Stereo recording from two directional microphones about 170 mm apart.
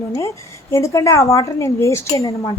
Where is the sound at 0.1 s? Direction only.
20° left (ahead or behind).